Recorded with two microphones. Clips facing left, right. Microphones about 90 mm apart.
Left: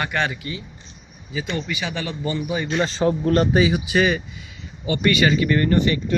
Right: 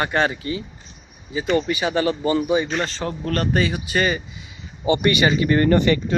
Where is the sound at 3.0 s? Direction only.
20° left (ahead or behind).